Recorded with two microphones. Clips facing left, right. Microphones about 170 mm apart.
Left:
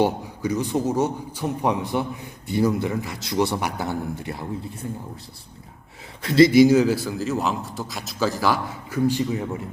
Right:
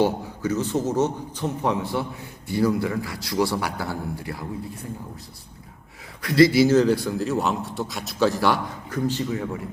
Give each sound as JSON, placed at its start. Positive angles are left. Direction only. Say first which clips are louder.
{"t": 0.0, "sound": "a man's voice", "louder": "even", "side_deg": 15}
{"t": 6.2, "sound": "a man's voice", "louder": "left 3 dB", "side_deg": 25}
{"t": 9.0, "sound": "a man's voice", "louder": "left 3 dB", "side_deg": 15}